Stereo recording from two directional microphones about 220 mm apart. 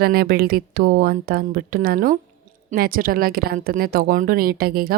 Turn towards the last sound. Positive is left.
turn(degrees=-45)  # may be behind; listen again after turning